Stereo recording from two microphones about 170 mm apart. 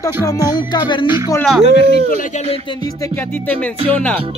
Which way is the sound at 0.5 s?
25° left (ahead or behind).